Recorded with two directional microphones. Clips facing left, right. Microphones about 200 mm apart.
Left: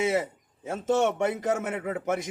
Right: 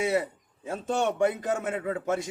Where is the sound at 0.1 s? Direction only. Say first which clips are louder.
Even; 20° left (ahead or behind).